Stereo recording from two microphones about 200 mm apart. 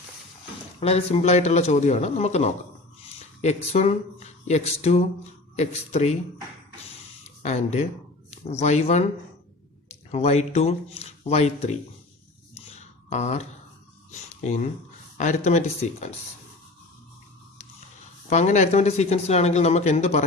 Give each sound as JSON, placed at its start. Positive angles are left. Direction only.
{"t": 0.8, "sound": "speech", "side_deg": 30}
{"t": 7.4, "sound": "speech", "side_deg": 35}
{"t": 13.1, "sound": "speech", "side_deg": 35}
{"t": 14.1, "sound": "a sound", "side_deg": 35}
{"t": 15.2, "sound": "speech", "side_deg": 35}
{"t": 18.3, "sound": "speech", "side_deg": 35}